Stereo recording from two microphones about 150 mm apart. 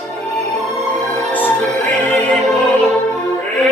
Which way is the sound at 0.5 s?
50° right (ahead or behind).